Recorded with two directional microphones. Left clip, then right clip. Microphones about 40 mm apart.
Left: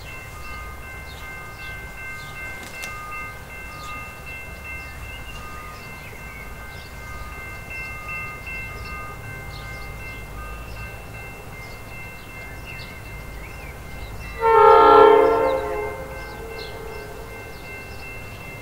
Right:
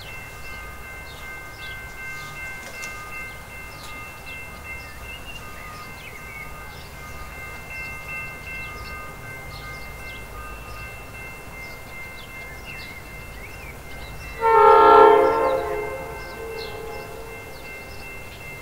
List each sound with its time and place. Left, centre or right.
14.4 s train: centre